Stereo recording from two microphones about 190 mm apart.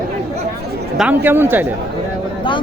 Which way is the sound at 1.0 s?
10° right (ahead or behind).